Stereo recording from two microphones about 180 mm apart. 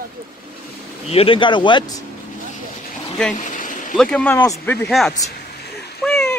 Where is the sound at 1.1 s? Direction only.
30° left (ahead or behind).